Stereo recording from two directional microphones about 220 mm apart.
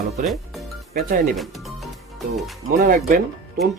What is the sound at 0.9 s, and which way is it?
Speech, 40° right (ahead or behind).